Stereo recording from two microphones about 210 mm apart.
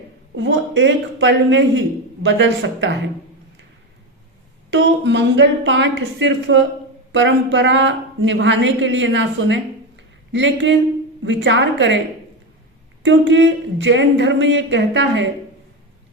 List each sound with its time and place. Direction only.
0.3 s speech: 60° right (ahead or behind)
4.7 s speech: 55° right (ahead or behind)
13.0 s speech: 60° right (ahead or behind)